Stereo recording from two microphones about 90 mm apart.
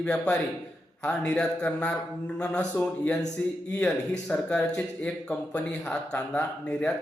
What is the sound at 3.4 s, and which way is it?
Speech, 15° left (ahead or behind).